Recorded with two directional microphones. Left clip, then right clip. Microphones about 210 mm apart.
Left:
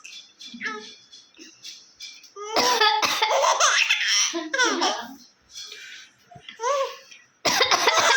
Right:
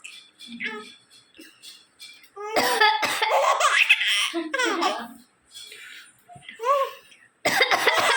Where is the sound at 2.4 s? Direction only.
5° left (ahead or behind).